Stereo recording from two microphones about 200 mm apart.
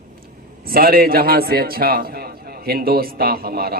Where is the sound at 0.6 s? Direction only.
50° right (ahead or behind).